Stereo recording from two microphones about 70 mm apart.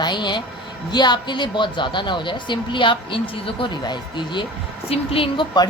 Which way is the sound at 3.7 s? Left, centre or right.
Left.